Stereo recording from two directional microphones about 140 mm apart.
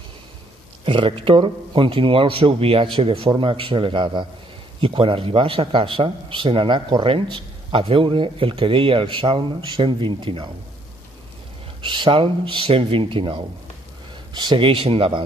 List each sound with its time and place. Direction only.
0.8 s a man's voice: 40° right (ahead or behind)
11.8 s a man's voice: 35° right (ahead or behind)